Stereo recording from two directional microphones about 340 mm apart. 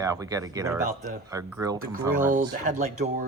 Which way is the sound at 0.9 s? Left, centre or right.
Right.